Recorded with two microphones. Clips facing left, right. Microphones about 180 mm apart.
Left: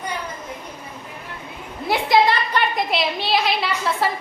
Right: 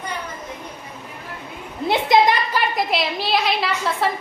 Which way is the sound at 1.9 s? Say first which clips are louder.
Right 1 dB; 20° right (ahead or behind).